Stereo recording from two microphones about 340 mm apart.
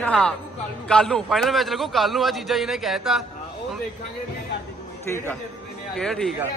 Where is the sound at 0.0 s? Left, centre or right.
Centre.